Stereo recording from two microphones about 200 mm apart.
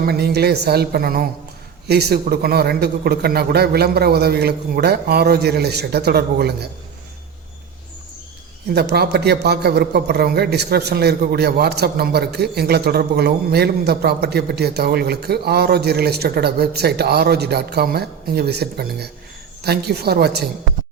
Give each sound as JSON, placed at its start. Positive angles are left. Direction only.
{"t": 0.0, "sound": "a man's voice", "side_deg": -50}
{"t": 8.7, "sound": "a man's voice", "side_deg": -55}